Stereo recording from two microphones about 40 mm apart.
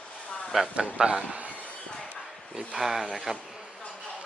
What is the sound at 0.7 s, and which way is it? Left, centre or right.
Speech, right.